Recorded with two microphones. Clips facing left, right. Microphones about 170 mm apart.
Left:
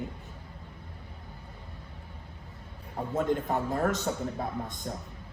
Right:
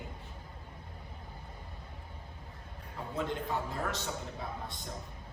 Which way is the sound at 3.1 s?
45° left (ahead or behind).